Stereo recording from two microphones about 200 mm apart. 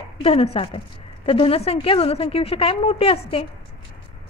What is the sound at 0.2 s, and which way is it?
A woman's voice, 30° left (ahead or behind).